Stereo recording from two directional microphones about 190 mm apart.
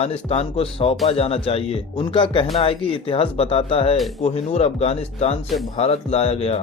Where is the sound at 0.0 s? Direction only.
30° left (ahead or behind).